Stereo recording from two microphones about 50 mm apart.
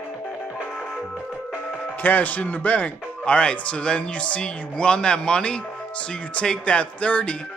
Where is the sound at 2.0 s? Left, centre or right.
Left.